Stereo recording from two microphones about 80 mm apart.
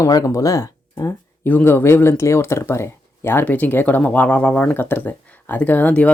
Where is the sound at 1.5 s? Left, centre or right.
Left.